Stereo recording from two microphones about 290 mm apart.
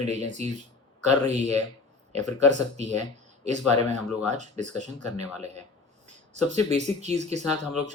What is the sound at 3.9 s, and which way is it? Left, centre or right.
Speech, right.